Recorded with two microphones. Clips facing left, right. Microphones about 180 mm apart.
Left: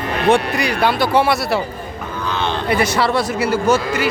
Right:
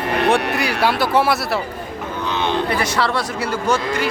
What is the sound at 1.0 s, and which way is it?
Speech, centre (ahead or behind).